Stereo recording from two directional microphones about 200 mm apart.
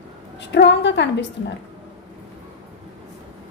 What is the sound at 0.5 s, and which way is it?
Speech, 60° left (ahead or behind).